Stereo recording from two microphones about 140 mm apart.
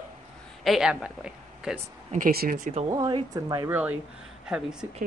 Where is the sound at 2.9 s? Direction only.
30° right (ahead or behind).